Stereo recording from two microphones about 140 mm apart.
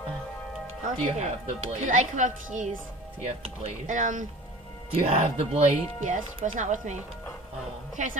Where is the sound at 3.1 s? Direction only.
50° right (ahead or behind).